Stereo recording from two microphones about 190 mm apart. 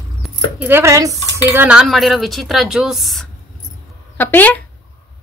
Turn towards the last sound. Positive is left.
turn(degrees=10)  # may be behind; listen again after turning